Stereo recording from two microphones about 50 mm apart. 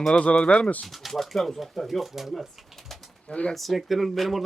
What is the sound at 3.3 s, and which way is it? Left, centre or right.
Speech, left.